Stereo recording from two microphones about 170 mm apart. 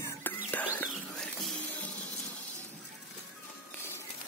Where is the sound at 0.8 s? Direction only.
5° left (ahead or behind).